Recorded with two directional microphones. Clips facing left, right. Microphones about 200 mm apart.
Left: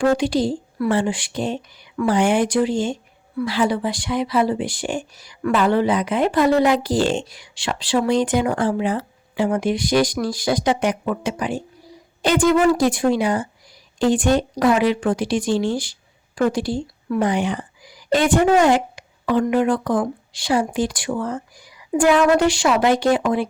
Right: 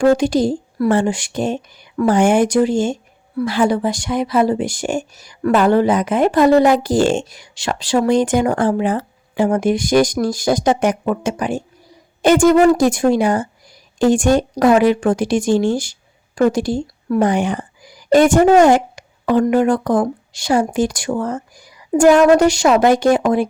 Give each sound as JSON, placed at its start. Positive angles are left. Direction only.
{"t": 0.0, "sound": "a woman's voice", "side_deg": -45}